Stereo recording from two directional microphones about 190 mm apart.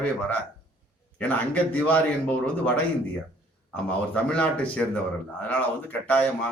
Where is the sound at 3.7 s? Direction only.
5° left (ahead or behind).